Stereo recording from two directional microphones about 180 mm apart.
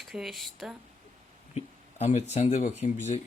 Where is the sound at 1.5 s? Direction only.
35° left (ahead or behind).